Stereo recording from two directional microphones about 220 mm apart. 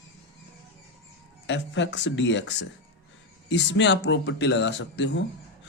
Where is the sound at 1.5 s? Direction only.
55° left (ahead or behind).